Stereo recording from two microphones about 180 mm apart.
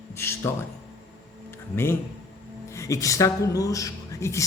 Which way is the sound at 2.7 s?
15° left (ahead or behind).